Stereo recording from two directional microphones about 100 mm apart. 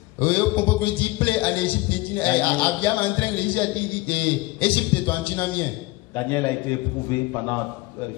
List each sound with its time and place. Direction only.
0.2 s a man's voice: 15° left (ahead or behind)